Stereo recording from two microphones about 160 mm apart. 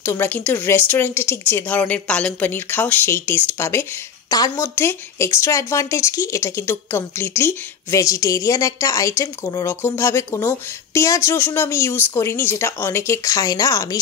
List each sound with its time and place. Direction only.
0.0 s speech: 15° left (ahead or behind)